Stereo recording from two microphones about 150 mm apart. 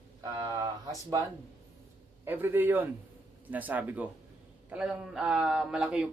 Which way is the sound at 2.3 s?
15° right (ahead or behind).